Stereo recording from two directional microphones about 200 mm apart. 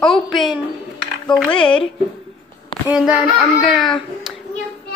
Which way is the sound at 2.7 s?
25° left (ahead or behind).